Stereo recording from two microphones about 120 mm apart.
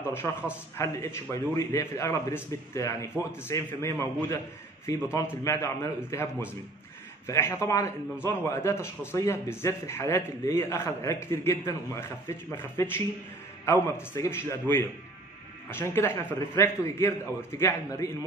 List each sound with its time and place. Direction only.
0.1 s a man's voice: 20° left (ahead or behind)